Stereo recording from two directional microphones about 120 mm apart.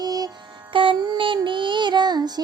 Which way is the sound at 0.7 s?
45° right (ahead or behind).